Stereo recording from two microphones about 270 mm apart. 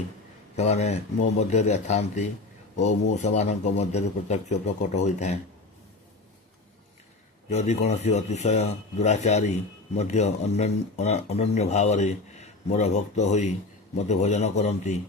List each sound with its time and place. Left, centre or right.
0.5 s speech: left
7.5 s speech: left